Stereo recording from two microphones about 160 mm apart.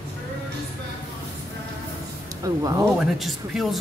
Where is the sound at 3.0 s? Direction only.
Centre (ahead or behind).